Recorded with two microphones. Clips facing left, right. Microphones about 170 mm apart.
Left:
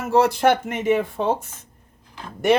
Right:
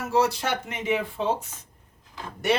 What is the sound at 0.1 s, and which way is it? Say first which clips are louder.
Speech: left 7 dB; 55° left (ahead or behind).